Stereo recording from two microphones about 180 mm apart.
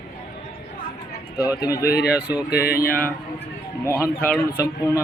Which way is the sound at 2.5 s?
60° left (ahead or behind).